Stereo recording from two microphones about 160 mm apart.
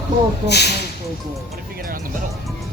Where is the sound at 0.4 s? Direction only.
90° left.